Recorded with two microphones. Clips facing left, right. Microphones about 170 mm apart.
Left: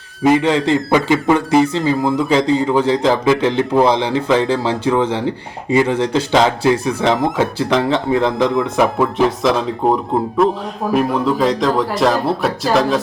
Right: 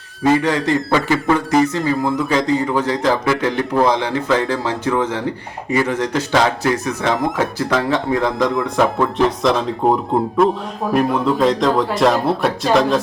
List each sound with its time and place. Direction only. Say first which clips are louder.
0.3 s speech: left 2 dB; 25° left (ahead or behind)
2.0 s speech: left 2 dB; centre (ahead or behind)
2.3 s speech: left 4 dB; 30° left (ahead or behind)
8.4 s speech: left 2 dB; 5° left (ahead or behind)